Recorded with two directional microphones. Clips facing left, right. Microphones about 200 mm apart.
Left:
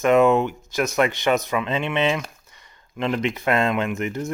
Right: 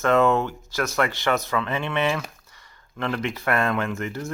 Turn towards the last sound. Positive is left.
turn(degrees=20)  # may be behind; listen again after turning